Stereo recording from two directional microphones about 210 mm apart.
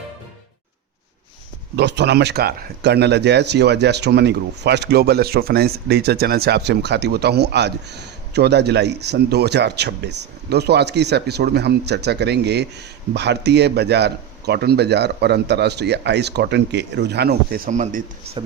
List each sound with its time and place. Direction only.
1.7 s speech: 55° right (ahead or behind); by 18.0 s 40° right (ahead or behind)